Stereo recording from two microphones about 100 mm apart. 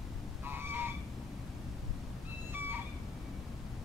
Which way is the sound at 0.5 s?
20° right (ahead or behind).